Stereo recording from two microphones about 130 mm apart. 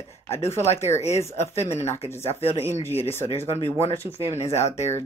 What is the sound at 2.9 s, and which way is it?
Speech, 15° left (ahead or behind).